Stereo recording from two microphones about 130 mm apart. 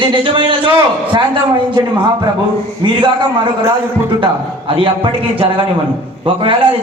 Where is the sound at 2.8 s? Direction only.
40° right (ahead or behind).